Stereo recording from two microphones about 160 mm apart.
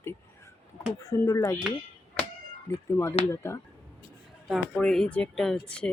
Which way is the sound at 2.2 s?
5° left (ahead or behind).